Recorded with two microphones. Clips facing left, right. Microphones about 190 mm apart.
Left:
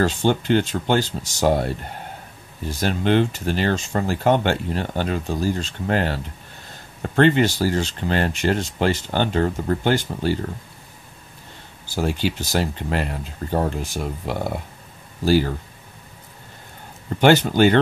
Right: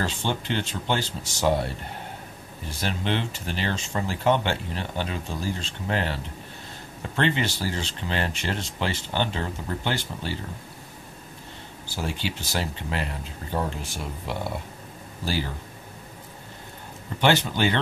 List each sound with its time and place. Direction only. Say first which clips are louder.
0.0 s speech: left 9 dB; 50° left (ahead or behind)
2.8 s speech: left 9 dB; 50° left (ahead or behind)
11.9 s speech: left 8 dB; 45° left (ahead or behind)
17.2 s speech: left 7 dB; 45° left (ahead or behind)